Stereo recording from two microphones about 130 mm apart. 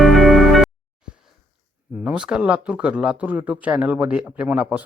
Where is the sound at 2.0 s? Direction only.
5° right (ahead or behind).